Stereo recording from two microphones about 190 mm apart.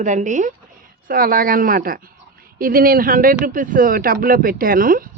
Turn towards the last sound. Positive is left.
turn(degrees=-50)  # may be behind; listen again after turning